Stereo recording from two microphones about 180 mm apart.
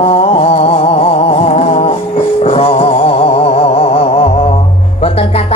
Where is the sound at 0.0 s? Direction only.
35° left (ahead or behind).